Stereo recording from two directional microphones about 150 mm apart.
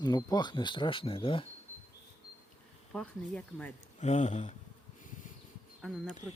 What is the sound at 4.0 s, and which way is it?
Speech, 50° left (ahead or behind).